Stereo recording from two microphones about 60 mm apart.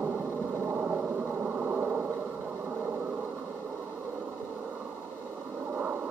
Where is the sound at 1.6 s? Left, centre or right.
Right.